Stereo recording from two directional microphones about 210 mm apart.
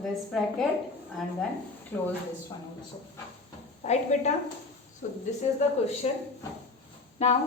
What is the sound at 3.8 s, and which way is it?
A woman's voice, 35° left (ahead or behind).